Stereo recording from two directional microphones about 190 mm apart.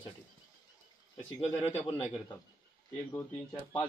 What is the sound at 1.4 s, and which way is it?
Speech, 30° left (ahead or behind).